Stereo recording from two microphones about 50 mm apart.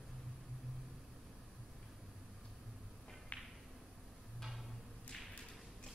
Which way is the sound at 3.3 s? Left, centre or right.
Left.